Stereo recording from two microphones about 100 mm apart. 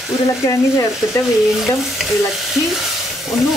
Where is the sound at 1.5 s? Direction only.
Centre (ahead or behind).